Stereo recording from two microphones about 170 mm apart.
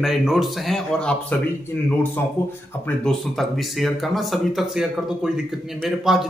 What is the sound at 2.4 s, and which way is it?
Speech, 15° left (ahead or behind).